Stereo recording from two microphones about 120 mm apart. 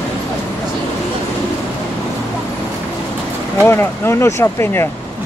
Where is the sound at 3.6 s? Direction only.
20° left (ahead or behind).